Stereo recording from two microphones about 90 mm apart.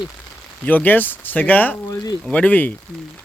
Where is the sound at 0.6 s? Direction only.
20° left (ahead or behind).